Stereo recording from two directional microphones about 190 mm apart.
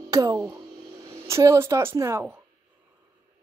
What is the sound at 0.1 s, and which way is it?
Speech, 20° right (ahead or behind).